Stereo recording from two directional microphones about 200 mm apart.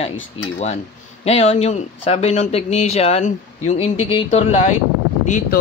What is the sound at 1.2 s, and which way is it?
Speech, 30° left (ahead or behind).